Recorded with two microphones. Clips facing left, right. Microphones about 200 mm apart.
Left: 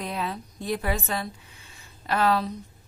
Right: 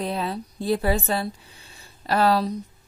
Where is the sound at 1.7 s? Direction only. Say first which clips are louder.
Right 4 dB; 35° right (ahead or behind).